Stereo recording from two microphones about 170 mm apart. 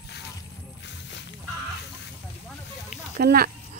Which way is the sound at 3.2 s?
65° right (ahead or behind).